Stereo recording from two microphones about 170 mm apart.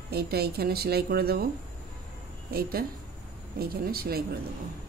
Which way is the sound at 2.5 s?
60° right (ahead or behind).